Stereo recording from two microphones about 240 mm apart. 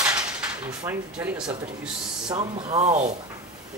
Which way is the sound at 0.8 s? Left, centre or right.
Centre.